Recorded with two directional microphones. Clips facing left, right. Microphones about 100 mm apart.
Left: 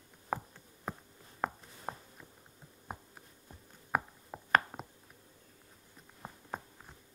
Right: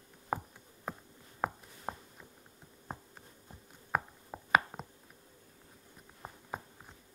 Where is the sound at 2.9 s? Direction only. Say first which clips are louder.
Even; 10° left (ahead or behind).